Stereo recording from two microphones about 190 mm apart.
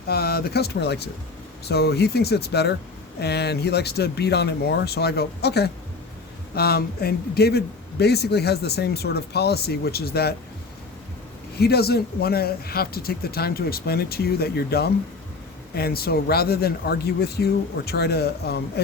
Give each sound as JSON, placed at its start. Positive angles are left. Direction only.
{"t": 0.1, "sound": "a man's voice", "side_deg": 55}
{"t": 11.6, "sound": "a man's voice", "side_deg": 55}